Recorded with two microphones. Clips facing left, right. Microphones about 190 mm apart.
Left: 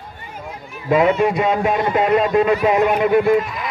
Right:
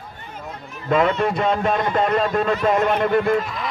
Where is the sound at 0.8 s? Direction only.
10° left (ahead or behind).